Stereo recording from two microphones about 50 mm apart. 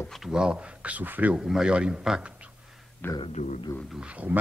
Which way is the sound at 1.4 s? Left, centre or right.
Centre.